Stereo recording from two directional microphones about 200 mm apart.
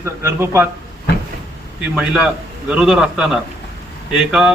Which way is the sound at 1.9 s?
5° right (ahead or behind).